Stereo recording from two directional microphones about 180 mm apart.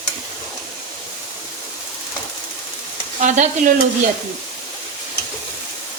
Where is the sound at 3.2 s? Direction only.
45° right (ahead or behind).